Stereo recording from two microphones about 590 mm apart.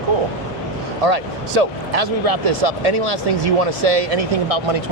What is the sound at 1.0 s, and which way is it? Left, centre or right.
Speech, right.